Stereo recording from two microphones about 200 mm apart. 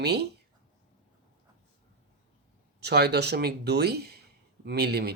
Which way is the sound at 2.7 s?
55° right (ahead or behind).